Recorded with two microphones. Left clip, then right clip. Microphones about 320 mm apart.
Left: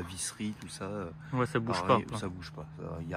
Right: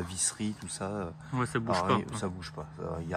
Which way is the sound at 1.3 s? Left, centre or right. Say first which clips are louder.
Right 1 dB; centre.